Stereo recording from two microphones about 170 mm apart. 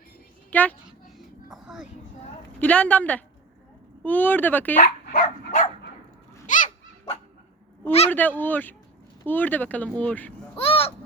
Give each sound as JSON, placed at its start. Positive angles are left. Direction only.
{"t": 0.5, "sound": "a woman's voice", "side_deg": 10}
{"t": 1.5, "sound": "music", "side_deg": -5}
{"t": 2.6, "sound": "speech", "side_deg": 10}
{"t": 4.8, "sound": "dog", "side_deg": 50}
{"t": 7.9, "sound": "speech", "side_deg": 35}
{"t": 8.1, "sound": "speech", "side_deg": 10}
{"t": 10.6, "sound": "a sound", "side_deg": 35}